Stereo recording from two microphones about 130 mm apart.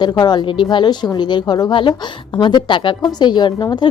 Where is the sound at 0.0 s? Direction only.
35° left (ahead or behind).